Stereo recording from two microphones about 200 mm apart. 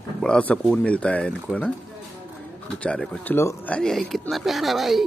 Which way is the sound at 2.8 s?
5° left (ahead or behind).